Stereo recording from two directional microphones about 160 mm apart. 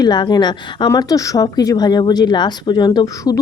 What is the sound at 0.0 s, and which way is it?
A woman's voice, 25° left (ahead or behind).